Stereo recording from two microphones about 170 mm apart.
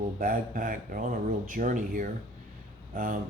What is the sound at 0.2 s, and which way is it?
Speech, 55° right (ahead or behind).